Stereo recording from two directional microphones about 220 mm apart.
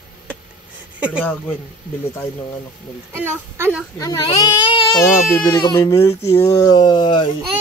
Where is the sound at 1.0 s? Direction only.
5° right (ahead or behind).